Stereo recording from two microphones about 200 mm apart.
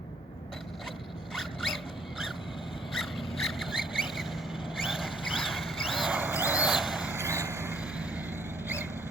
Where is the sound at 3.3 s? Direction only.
Centre (ahead or behind).